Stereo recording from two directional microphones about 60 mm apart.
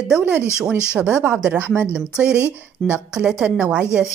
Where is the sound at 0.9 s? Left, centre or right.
Centre.